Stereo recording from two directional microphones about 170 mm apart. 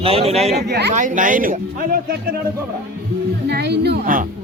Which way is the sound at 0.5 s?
80° right.